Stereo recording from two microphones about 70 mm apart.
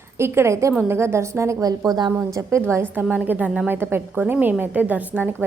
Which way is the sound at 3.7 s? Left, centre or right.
Right.